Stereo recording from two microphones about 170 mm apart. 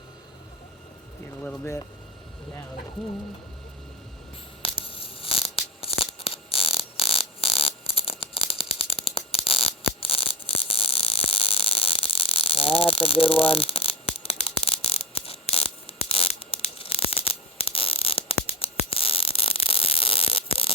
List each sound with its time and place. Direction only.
1.4 s speech: 10° left (ahead or behind)
4.6 s tearing: 30° left (ahead or behind)